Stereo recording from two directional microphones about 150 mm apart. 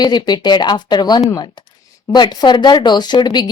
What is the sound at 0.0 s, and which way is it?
Speech, 30° left (ahead or behind).